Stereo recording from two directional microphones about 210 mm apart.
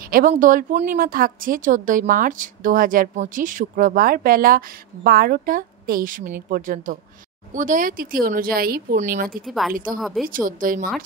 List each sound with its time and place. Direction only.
0.0 s speech: 40° right (ahead or behind)
9.5 s speech: centre (ahead or behind)
10.2 s speech: 40° right (ahead or behind)